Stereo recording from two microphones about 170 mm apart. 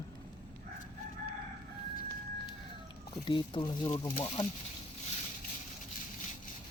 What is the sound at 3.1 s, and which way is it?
Speech, 25° left (ahead or behind).